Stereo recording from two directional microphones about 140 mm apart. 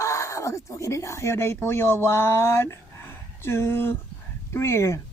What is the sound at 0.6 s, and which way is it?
Speech, 20° left (ahead or behind).